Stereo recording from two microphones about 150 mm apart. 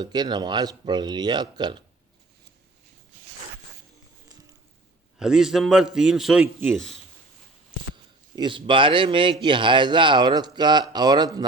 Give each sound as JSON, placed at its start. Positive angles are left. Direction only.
{"t": 0.0, "sound": "speech", "side_deg": -30}
{"t": 5.2, "sound": "a man's voice", "side_deg": -5}
{"t": 8.4, "sound": "speech", "side_deg": -35}